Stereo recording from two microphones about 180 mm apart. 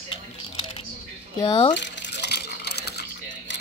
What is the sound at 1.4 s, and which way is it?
Speech, 25° left (ahead or behind).